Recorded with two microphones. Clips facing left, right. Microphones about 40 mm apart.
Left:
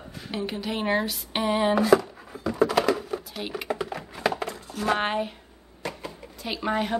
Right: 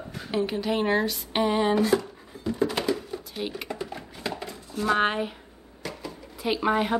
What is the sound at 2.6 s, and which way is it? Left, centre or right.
Typing, left.